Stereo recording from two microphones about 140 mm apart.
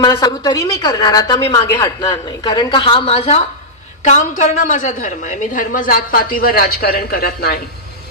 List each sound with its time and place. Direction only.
0.0 s a man's voice: 25° left (ahead or behind); by 3.4 s 45° left (ahead or behind)
4.0 s a woman's voice: 60° left (ahead or behind); by 7.6 s 90° left